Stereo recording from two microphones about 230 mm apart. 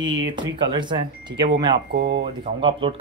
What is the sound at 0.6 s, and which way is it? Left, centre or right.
Speech, centre.